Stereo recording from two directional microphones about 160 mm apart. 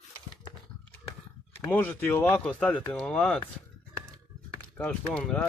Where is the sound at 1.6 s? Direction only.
10° left (ahead or behind).